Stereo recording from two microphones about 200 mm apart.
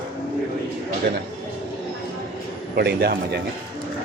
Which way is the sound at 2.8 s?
55° right (ahead or behind).